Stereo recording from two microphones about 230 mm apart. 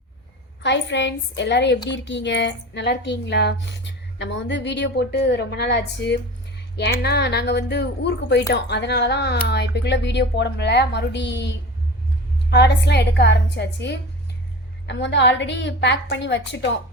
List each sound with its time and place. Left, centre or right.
0.6 s a woman's voice: left